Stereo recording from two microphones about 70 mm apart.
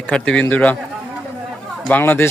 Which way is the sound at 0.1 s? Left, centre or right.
Centre.